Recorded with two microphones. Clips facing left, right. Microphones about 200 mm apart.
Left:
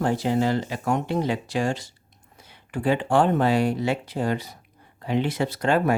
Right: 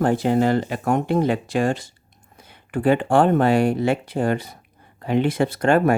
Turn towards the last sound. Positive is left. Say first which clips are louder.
# right 4 dB
turn(degrees=-50)  # may be behind; listen again after turning